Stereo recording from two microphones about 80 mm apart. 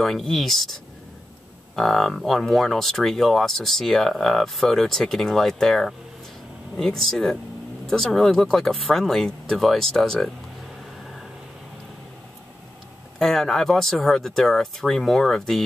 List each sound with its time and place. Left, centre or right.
0.0 s speech: centre
1.8 s speech: centre
13.2 s speech: centre